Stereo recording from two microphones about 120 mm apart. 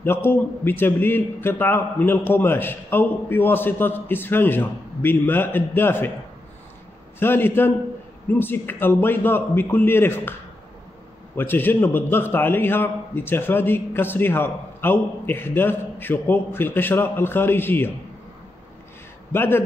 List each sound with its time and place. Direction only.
0.0 s a man's voice: 15° left (ahead or behind)
7.2 s a man's voice: 20° left (ahead or behind)
11.3 s a man's voice: 15° left (ahead or behind)
19.3 s a man's voice: 20° left (ahead or behind)